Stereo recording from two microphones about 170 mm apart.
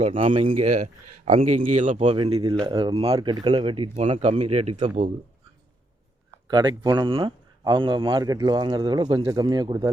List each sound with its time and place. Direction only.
0.0 s speech: 30° right (ahead or behind)
1.5 s speech: 50° right (ahead or behind)
2.0 s speech: 35° right (ahead or behind)
3.9 s speech: 40° right (ahead or behind)
6.5 s speech: 25° right (ahead or behind)